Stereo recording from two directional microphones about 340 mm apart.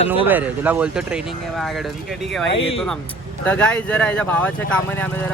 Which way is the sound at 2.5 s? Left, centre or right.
Centre.